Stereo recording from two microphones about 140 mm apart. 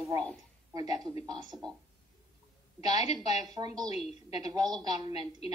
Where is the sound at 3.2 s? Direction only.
30° right (ahead or behind).